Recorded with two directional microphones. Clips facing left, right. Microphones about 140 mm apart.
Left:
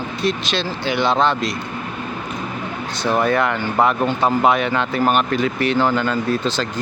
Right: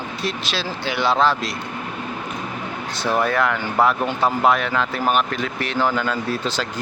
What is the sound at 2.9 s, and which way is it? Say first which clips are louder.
Speech: left 2 dB; 5° right (ahead or behind).